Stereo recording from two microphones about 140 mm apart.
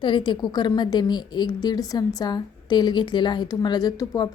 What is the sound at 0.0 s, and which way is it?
A woman's voice, 35° left (ahead or behind).